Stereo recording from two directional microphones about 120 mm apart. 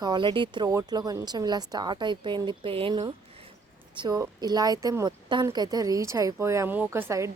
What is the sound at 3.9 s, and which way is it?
A woman's voice, 35° right (ahead or behind).